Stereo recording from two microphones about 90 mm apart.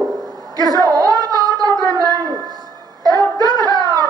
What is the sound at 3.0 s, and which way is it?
Music, 50° right (ahead or behind).